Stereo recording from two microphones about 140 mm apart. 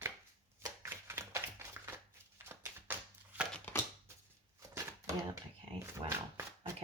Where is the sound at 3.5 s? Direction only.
15° left (ahead or behind).